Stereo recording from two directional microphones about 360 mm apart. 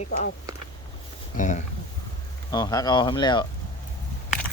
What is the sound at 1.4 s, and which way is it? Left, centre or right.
Speech, centre.